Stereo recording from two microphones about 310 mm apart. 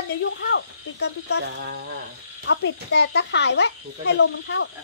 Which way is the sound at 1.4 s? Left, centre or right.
Right.